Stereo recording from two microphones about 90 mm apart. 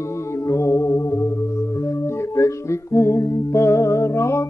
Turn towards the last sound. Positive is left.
turn(degrees=35)  # may be behind; listen again after turning